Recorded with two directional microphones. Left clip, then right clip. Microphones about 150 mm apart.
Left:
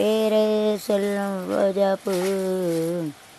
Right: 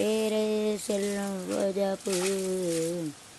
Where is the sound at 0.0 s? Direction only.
15° left (ahead or behind).